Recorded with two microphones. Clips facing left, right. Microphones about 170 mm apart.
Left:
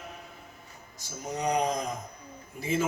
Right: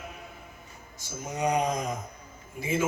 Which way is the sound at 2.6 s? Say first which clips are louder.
Even; 35° left (ahead or behind).